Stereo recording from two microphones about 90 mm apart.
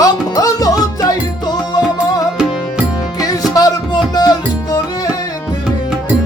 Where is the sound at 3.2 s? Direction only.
40° left (ahead or behind).